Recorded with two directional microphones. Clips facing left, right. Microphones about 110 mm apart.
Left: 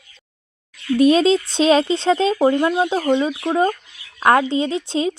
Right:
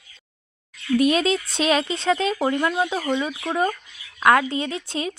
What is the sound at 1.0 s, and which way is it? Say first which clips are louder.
Speech: left 7 dB; 30° left (ahead or behind).